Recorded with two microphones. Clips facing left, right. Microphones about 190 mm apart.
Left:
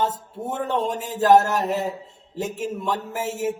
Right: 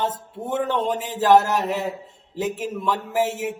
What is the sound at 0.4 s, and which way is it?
A man's voice, 40° left (ahead or behind).